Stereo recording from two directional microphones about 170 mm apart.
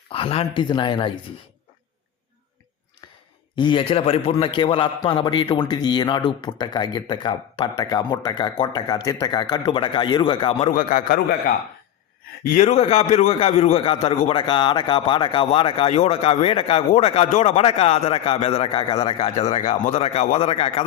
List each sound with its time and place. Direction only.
0.1 s a man's voice: 35° left (ahead or behind)
3.5 s a man's voice: 30° left (ahead or behind)
10.7 s a man's voice: 50° left (ahead or behind)
12.5 s speech: 45° left (ahead or behind)